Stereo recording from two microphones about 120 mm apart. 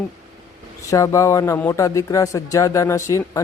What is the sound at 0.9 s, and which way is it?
Speech, 25° left (ahead or behind).